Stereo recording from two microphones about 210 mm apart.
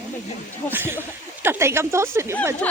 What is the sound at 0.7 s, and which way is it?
Speech, 10° right (ahead or behind).